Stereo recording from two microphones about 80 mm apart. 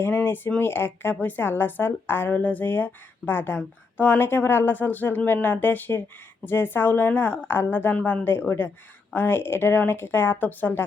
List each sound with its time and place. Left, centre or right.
0.0 s a woman's voice: left